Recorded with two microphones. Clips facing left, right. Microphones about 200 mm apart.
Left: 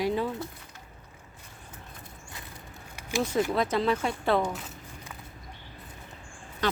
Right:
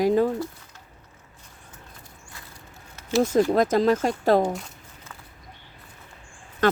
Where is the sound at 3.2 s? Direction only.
45° right (ahead or behind).